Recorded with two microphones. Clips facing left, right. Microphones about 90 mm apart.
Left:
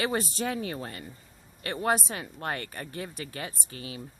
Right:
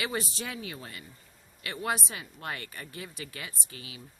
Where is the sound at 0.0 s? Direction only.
40° left (ahead or behind).